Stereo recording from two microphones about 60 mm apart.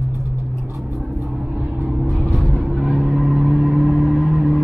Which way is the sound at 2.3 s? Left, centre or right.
Centre.